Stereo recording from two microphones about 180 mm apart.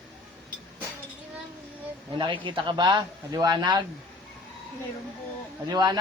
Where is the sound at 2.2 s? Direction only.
25° right (ahead or behind).